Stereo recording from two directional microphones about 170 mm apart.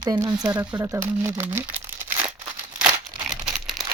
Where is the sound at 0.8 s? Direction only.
15° right (ahead or behind).